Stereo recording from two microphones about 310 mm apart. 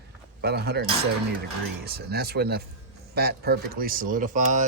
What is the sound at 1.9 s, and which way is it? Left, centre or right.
Speech, right.